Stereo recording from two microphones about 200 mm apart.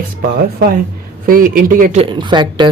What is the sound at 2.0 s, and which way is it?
Speech, 25° right (ahead or behind).